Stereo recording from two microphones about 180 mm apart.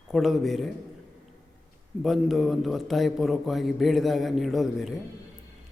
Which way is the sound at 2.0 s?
Centre (ahead or behind).